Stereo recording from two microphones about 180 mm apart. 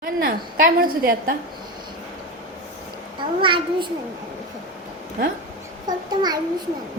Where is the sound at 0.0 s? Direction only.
50° right (ahead or behind).